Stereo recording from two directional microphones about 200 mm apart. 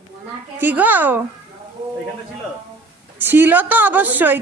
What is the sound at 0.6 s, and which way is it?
Speech, 10° right (ahead or behind).